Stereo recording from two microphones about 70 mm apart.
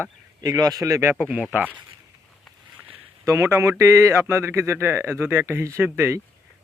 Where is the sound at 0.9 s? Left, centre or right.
Right.